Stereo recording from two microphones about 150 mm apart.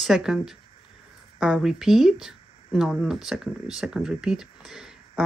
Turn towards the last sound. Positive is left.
turn(degrees=-5)  # may be behind; listen again after turning